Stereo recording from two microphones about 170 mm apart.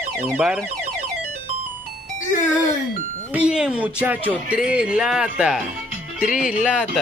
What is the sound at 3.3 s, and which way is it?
Speech, 5° right (ahead or behind).